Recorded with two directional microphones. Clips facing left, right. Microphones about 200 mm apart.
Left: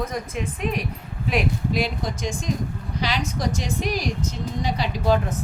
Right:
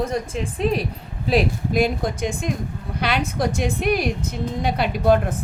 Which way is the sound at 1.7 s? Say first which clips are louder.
Right 5 dB; 50° right (ahead or behind).